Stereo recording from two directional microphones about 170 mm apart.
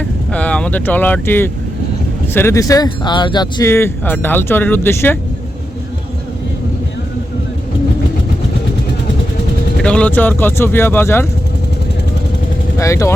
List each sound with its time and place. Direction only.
0.0 s vehicle: 5° left (ahead or behind)
2.3 s speech: 15° left (ahead or behind)
9.8 s speech: 5° left (ahead or behind)
12.8 s speech: 20° left (ahead or behind)